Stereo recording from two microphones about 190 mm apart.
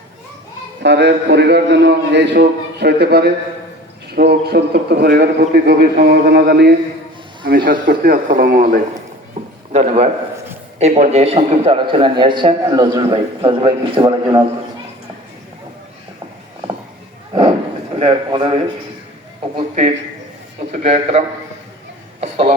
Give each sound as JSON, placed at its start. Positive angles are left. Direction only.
{"t": 0.8, "sound": "a man's voice", "side_deg": -65}
{"t": 9.7, "sound": "a man's voice", "side_deg": -35}
{"t": 18.0, "sound": "a man's voice", "side_deg": -25}
{"t": 19.5, "sound": "a man's voice", "side_deg": -35}